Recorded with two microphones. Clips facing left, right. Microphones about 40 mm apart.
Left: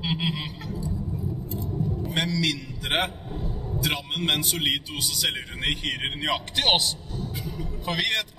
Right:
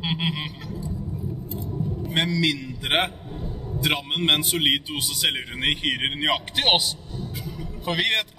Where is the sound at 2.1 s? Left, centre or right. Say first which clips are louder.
Right 4 dB; right.